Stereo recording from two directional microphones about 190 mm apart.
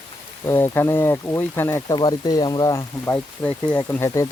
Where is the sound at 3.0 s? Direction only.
10° left (ahead or behind).